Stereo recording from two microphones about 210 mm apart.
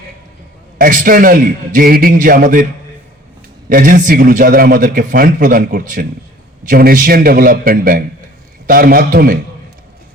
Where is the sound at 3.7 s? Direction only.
40° right (ahead or behind).